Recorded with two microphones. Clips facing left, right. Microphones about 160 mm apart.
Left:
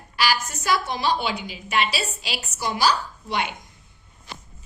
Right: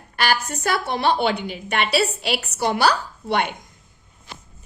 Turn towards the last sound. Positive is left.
turn(degrees=-60)  # may be behind; listen again after turning